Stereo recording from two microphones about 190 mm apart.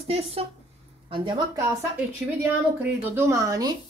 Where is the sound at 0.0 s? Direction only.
30° right (ahead or behind).